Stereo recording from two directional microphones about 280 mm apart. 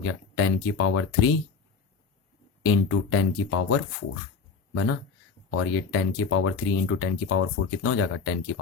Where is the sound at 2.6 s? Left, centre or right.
Left.